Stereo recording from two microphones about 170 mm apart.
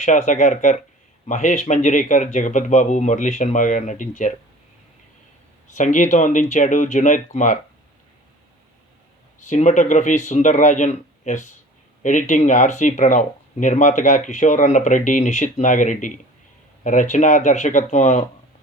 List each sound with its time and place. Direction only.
0.0 s speech: 45° left (ahead or behind)
5.7 s speech: 45° left (ahead or behind)
9.4 s speech: 45° left (ahead or behind)